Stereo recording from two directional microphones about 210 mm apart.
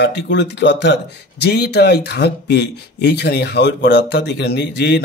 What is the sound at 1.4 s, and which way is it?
Speech, 50° left (ahead or behind).